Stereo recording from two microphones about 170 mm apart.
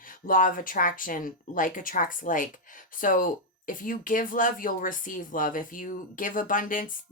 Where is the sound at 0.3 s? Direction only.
50° left (ahead or behind).